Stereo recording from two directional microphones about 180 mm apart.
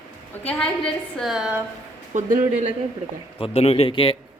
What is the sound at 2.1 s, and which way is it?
Speech, 45° right (ahead or behind).